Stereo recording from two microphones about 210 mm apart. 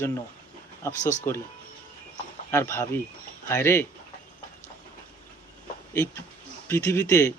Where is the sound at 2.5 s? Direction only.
10° left (ahead or behind).